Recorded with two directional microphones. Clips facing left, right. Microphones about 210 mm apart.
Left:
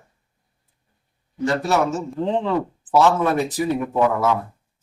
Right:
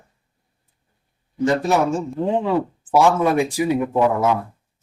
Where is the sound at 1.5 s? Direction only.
15° right (ahead or behind).